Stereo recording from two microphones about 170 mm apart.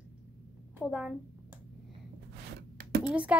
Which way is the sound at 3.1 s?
5° right (ahead or behind).